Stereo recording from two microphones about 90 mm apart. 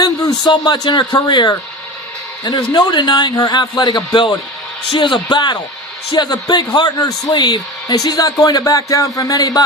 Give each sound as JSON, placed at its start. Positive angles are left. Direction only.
{"t": 0.0, "sound": "a man's voice", "side_deg": 50}